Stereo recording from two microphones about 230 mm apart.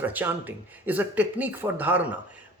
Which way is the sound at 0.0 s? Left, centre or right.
Centre.